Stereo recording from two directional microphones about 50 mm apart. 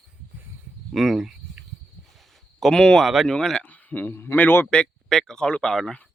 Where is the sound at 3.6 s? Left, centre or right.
Left.